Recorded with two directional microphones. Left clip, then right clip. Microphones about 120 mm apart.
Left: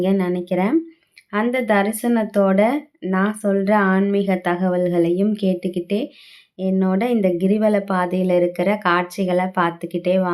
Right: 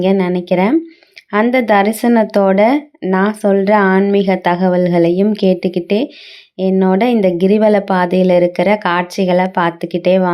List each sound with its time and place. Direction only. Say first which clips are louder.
0.0 s a woman's voice: right 6 dB; 30° right (ahead or behind)